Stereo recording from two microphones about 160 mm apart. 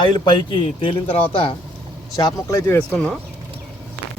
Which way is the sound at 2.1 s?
20° left (ahead or behind).